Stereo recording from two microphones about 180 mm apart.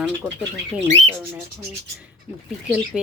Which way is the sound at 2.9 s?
5° right (ahead or behind).